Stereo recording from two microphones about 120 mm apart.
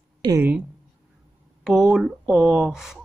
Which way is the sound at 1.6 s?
5° right (ahead or behind).